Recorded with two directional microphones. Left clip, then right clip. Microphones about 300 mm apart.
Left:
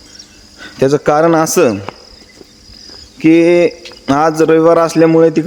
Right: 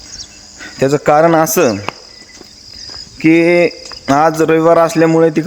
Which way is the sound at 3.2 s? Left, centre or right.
Centre.